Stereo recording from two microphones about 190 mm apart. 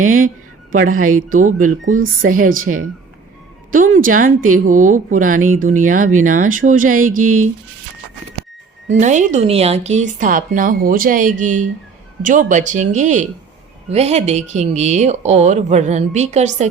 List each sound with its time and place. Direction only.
0.0 s speech: 45° right (ahead or behind)
9.0 s speech: 40° right (ahead or behind)